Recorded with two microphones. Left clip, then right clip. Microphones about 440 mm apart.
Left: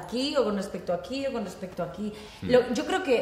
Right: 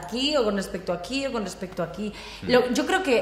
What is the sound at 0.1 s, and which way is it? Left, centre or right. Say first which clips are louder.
Speech: right 3 dB; right.